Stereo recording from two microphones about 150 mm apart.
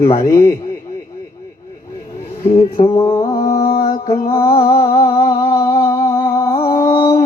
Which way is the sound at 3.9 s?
40° left (ahead or behind).